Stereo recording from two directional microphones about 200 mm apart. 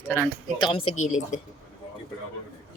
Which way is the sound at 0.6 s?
25° left (ahead or behind).